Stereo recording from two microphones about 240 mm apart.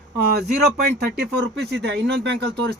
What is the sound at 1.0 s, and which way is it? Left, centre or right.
Speech, right.